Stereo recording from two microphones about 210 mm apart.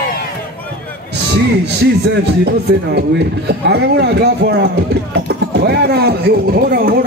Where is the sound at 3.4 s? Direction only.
50° right (ahead or behind).